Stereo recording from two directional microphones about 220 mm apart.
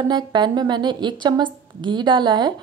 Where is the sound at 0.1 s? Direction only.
20° right (ahead or behind).